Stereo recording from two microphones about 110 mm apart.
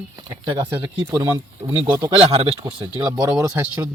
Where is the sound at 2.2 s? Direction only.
65° right (ahead or behind).